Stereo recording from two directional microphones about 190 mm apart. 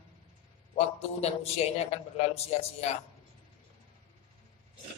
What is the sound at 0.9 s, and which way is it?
A man's voice, 35° left (ahead or behind).